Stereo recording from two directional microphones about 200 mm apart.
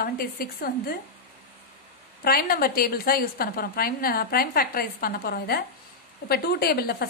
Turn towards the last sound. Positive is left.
turn(degrees=50)  # may be behind; listen again after turning